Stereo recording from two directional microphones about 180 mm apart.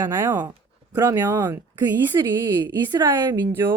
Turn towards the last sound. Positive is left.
turn(degrees=-15)  # may be behind; listen again after turning